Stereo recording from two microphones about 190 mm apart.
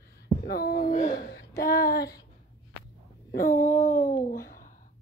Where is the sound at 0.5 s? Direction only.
55° left (ahead or behind).